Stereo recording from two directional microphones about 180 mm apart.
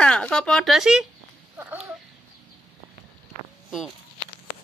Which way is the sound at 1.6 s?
10° right (ahead or behind).